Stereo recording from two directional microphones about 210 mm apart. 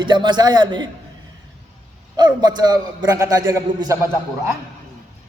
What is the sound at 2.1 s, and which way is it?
A man's voice, 20° right (ahead or behind).